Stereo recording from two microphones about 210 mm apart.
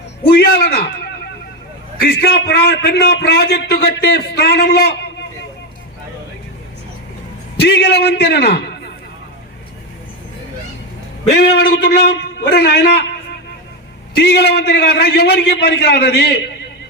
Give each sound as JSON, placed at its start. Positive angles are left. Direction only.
{"t": 0.3, "sound": "a sound", "side_deg": 50}
{"t": 2.0, "sound": "a man's voice", "side_deg": 50}
{"t": 7.6, "sound": "a man's voice", "side_deg": 50}
{"t": 11.3, "sound": "a man's voice", "side_deg": 50}
{"t": 14.2, "sound": "a man's voice", "side_deg": 50}